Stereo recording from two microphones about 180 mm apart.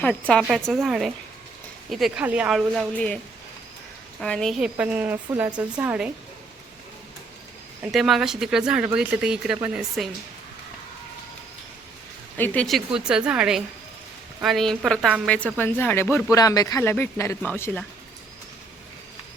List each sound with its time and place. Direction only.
0.0 s speech: 5° left (ahead or behind)
4.2 s speech: 5° left (ahead or behind)
7.9 s speech: centre (ahead or behind)
12.4 s speech: 5° left (ahead or behind)